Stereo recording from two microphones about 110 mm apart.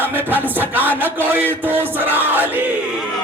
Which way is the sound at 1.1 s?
20° right (ahead or behind).